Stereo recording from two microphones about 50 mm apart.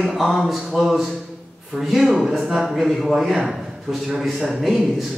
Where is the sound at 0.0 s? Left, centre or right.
Centre.